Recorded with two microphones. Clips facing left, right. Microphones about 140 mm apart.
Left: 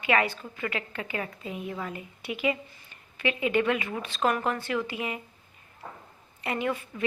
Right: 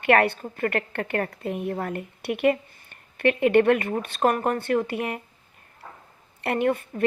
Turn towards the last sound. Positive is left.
turn(degrees=-55)  # may be behind; listen again after turning